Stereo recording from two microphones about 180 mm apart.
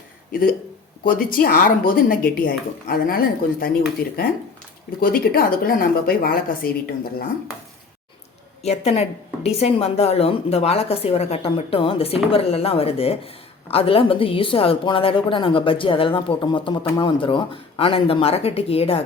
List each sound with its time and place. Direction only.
0.3 s speech: 55° left (ahead or behind)
4.9 s a woman's voice: 55° left (ahead or behind)
8.6 s a woman's voice: 35° left (ahead or behind)